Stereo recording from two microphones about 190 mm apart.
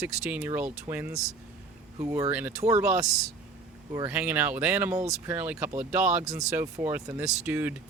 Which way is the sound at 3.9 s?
10° right (ahead or behind).